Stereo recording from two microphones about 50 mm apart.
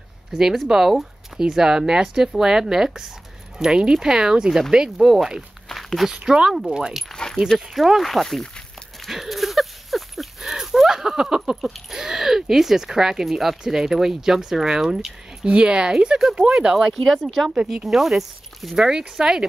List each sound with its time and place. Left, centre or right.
0.3 s speech: centre
5.7 s a sound: centre
6.1 s speech: centre
9.0 s a sound: centre
11.9 s speech: centre
15.4 s speech: centre
16.7 s speech: centre
18.9 s speech: centre